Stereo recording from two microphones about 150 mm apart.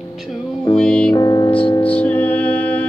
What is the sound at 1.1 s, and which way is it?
Music, 25° left (ahead or behind).